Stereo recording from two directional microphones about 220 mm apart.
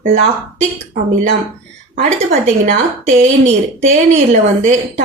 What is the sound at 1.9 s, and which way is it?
A woman's voice, 35° right (ahead or behind).